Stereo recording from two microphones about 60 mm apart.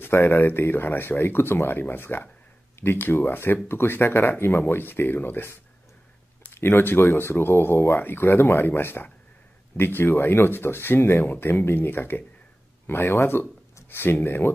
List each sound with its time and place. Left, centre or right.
0.0 s speech: left